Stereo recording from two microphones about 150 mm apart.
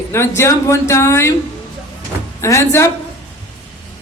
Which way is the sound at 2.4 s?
20° left (ahead or behind).